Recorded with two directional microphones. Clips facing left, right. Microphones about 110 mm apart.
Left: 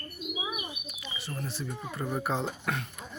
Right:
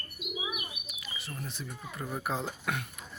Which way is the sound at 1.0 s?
Centre (ahead or behind).